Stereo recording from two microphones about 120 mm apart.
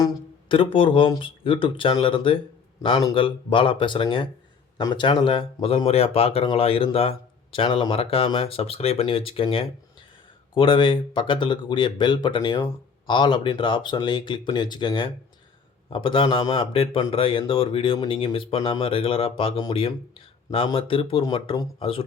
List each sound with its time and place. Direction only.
0.4 s speech: 45° left (ahead or behind)
5.6 s speech: 50° left (ahead or behind)